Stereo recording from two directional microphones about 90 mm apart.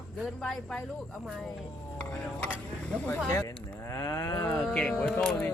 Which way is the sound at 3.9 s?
35° left (ahead or behind).